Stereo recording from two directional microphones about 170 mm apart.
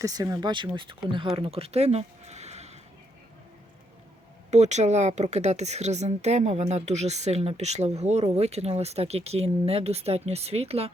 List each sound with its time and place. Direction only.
0.0 s speech: 20° right (ahead or behind); by 2.7 s 40° right (ahead or behind)
4.5 s a woman's voice: 40° right (ahead or behind)